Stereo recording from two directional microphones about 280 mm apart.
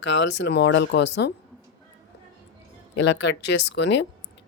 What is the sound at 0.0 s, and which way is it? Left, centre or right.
Speech, left.